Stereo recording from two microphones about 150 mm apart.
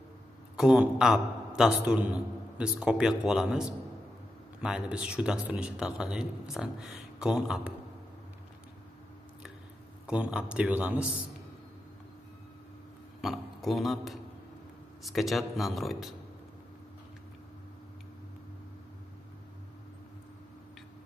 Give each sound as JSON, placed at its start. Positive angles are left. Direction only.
{"t": 0.6, "sound": "speech", "side_deg": -5}
{"t": 10.0, "sound": "speech", "side_deg": -5}
{"t": 13.2, "sound": "a man's voice", "side_deg": 0}